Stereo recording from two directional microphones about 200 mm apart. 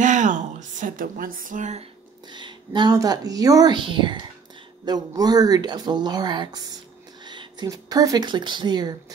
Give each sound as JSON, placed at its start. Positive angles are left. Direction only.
{"t": 0.0, "sound": "music", "side_deg": -40}
{"t": 2.2, "sound": "a woman's voice", "side_deg": -20}